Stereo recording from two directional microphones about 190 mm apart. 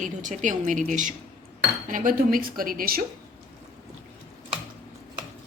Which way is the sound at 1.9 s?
45° right (ahead or behind).